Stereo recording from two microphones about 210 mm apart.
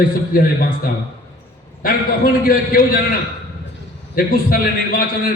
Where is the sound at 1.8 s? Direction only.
45° left (ahead or behind).